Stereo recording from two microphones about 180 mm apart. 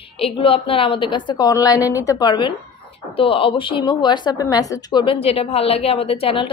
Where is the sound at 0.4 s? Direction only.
30° left (ahead or behind).